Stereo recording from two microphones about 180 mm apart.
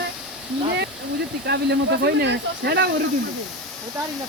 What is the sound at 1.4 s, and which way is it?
Speech, 65° right (ahead or behind).